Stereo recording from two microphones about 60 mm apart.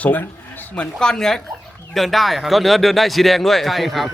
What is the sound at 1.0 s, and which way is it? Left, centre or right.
Speech, centre.